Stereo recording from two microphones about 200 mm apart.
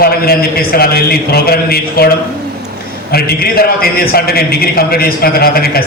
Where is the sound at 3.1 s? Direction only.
50° left (ahead or behind).